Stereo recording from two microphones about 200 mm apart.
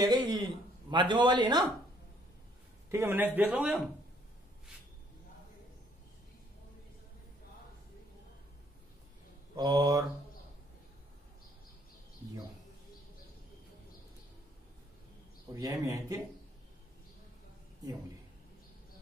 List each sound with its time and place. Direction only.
0.0 s a man's voice: 20° right (ahead or behind)
2.9 s a man's voice: 10° right (ahead or behind)
9.6 s a man's voice: 20° right (ahead or behind)
15.5 s a man's voice: 15° right (ahead or behind)